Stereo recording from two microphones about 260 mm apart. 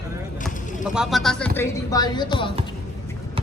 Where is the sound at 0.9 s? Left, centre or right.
Centre.